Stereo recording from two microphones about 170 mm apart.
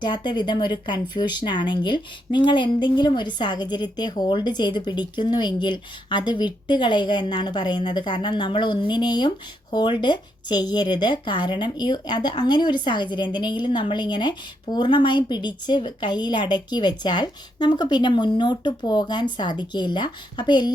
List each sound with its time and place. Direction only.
0.0 s speech: 25° left (ahead or behind)